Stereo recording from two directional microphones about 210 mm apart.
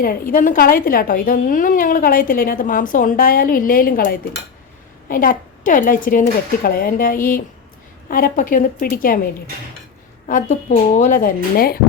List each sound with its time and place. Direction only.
0.0 s a woman's voice: 45° left (ahead or behind)
10.2 s speech: 35° left (ahead or behind)